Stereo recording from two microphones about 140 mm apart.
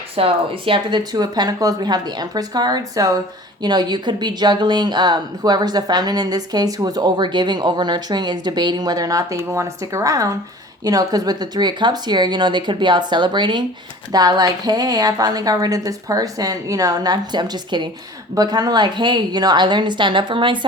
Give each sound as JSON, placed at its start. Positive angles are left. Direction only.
{"t": 0.2, "sound": "a woman's voice", "side_deg": -40}